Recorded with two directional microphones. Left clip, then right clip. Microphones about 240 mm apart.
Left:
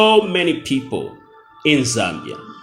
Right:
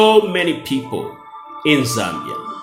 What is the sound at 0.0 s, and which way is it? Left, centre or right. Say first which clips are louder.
Speech: right 1 dB; left.